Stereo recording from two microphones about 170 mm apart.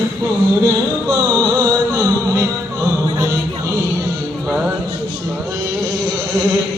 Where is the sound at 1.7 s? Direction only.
20° right (ahead or behind).